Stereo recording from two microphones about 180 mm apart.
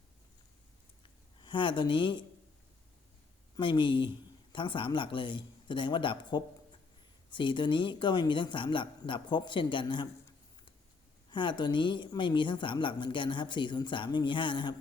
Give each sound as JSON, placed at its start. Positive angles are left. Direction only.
{"t": 1.0, "sound": "a sound", "side_deg": 25}
{"t": 3.6, "sound": "a woman's voice", "side_deg": 25}
{"t": 11.3, "sound": "a woman's voice", "side_deg": 25}